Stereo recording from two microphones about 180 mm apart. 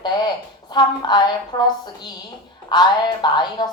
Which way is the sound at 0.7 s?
25° left (ahead or behind).